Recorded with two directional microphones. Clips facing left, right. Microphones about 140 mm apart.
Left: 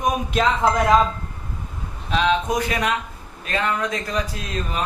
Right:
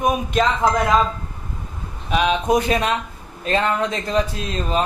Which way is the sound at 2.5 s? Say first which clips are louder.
Right 4 dB; 25° right (ahead or behind).